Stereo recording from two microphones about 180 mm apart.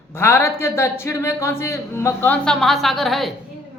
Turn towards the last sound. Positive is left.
turn(degrees=0)  # may be behind; listen again after turning